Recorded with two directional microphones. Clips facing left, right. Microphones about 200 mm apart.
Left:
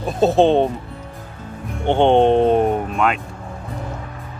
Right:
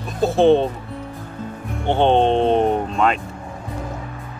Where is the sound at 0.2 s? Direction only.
20° left (ahead or behind).